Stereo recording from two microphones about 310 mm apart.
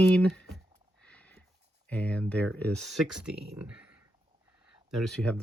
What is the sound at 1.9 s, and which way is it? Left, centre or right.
Speech, centre.